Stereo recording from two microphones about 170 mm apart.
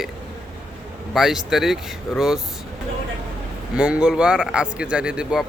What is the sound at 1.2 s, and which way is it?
Speech, centre (ahead or behind).